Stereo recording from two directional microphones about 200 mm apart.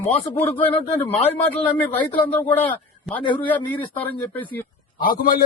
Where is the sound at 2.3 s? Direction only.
10° left (ahead or behind).